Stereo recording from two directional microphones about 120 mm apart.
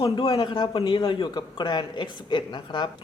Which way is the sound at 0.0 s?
50° left (ahead or behind).